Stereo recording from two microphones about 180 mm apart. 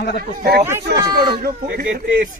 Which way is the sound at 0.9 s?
65° right (ahead or behind).